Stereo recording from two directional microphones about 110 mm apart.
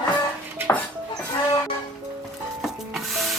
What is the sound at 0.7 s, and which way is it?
Dishes, 20° left (ahead or behind).